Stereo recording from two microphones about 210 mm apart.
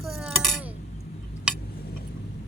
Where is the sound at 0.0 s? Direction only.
Centre (ahead or behind).